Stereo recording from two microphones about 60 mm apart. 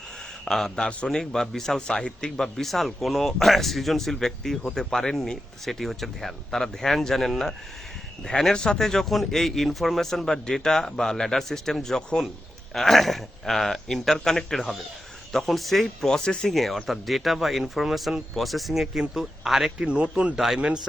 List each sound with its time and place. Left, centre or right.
0.4 s a man's voice: centre
19.8 s speech: centre